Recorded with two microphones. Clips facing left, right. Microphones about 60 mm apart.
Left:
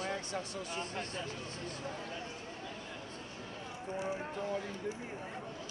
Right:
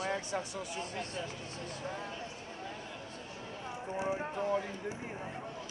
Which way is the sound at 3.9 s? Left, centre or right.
Centre.